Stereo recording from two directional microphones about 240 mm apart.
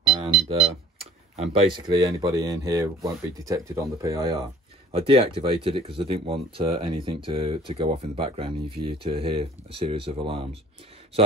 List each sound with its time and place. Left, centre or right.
0.0 s speech: centre